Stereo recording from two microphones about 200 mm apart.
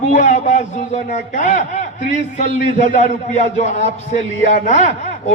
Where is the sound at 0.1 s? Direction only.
35° left (ahead or behind).